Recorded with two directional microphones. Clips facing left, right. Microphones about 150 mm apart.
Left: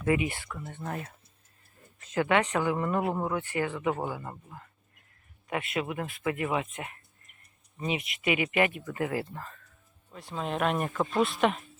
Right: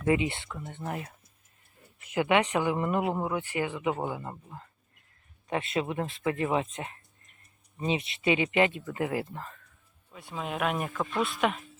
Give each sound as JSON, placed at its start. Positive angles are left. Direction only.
{"t": 0.0, "sound": "speech", "side_deg": -25}
{"t": 2.1, "sound": "speech", "side_deg": -15}
{"t": 10.1, "sound": "speech", "side_deg": 0}